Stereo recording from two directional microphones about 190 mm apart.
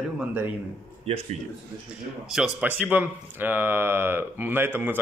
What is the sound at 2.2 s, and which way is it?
Speech, 5° right (ahead or behind).